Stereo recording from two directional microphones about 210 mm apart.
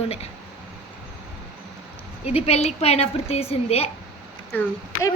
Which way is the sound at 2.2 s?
30° left (ahead or behind).